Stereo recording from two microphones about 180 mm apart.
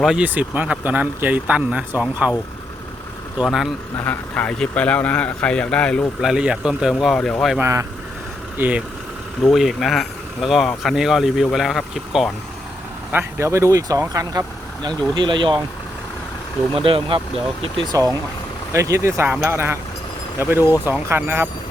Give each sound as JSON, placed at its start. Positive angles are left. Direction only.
{"t": 0.0, "sound": "speech", "side_deg": -5}
{"t": 3.4, "sound": "a man's voice", "side_deg": 0}
{"t": 3.9, "sound": "a man's voice", "side_deg": 10}
{"t": 7.6, "sound": "a man's voice", "side_deg": -15}
{"t": 13.1, "sound": "speech", "side_deg": -15}
{"t": 16.7, "sound": "speech", "side_deg": -30}
{"t": 17.9, "sound": "speech", "side_deg": -20}